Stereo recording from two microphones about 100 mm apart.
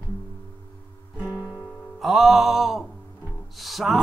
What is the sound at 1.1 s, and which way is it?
Music, 25° left (ahead or behind).